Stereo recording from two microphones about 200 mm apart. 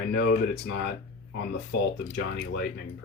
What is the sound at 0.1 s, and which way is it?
Speech, 55° left (ahead or behind).